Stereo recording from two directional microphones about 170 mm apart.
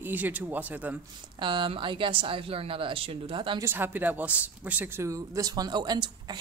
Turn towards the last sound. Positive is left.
turn(degrees=-25)  # may be behind; listen again after turning